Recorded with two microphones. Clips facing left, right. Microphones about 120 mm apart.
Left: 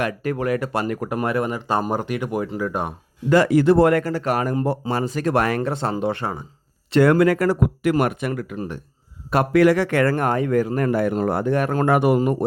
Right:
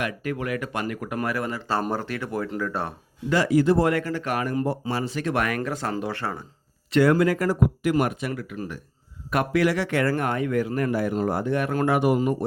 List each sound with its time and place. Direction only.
0.0 s speech: 40° left (ahead or behind)
1.2 s speech: 25° left (ahead or behind)
3.2 s speech: 55° left (ahead or behind)
4.0 s speech: 35° left (ahead or behind)
4.6 s speech: 60° left (ahead or behind); by 6.4 s 20° left (ahead or behind)
7.0 s speech: 65° left (ahead or behind)
8.5 s speech: 30° left (ahead or behind)
9.5 s speech: 50° left (ahead or behind)
10.8 s speech: 50° left (ahead or behind)